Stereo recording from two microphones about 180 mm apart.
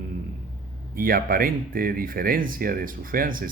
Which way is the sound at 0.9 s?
55° right (ahead or behind).